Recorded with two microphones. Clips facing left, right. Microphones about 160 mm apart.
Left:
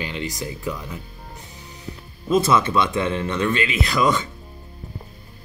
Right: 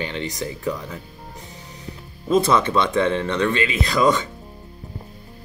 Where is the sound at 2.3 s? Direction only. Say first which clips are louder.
Right 1 dB; 5° left (ahead or behind).